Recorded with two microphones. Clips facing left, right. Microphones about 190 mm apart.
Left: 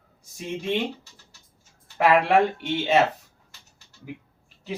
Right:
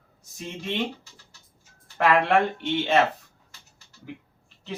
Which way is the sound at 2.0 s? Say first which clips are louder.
Left 2 dB; 10° left (ahead or behind).